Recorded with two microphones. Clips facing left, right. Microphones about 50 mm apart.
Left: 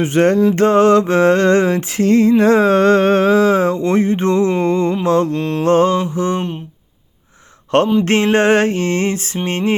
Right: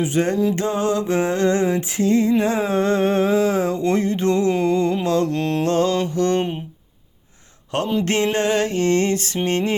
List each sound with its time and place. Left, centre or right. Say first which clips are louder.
0.0 s a sound: left 6 dB; left
3.8 s mantra: left 4 dB; left; by 6.4 s centre
8.0 s mantra: left 6 dB; left